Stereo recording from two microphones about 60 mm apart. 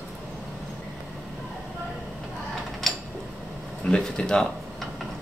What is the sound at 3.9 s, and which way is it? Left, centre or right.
Speech, centre.